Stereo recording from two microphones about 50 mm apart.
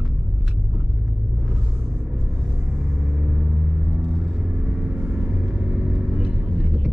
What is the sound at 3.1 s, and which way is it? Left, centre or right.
Vehicle, right.